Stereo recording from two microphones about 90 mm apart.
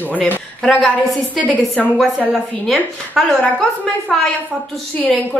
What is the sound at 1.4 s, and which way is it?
Speech, 20° left (ahead or behind).